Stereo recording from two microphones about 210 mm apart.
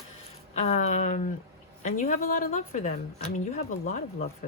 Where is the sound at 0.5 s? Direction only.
30° left (ahead or behind).